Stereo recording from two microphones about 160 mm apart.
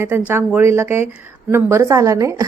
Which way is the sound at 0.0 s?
10° right (ahead or behind).